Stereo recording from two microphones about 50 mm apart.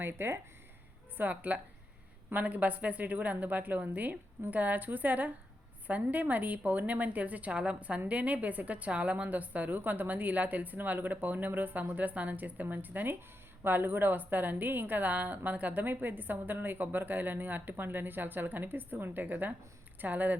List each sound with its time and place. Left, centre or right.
0.0 s speech: right
1.1 s a woman's voice: right